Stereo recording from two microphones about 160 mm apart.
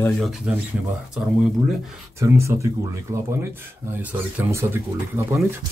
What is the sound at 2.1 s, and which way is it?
Speech, 20° right (ahead or behind).